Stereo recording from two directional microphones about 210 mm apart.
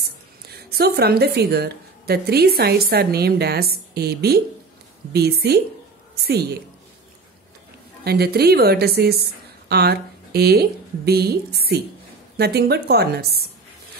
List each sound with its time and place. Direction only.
0.0 s a woman's voice: 50° right (ahead or behind)
8.0 s speech: 50° right (ahead or behind)